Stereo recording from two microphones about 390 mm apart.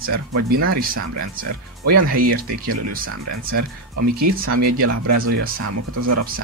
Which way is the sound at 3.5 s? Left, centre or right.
Right.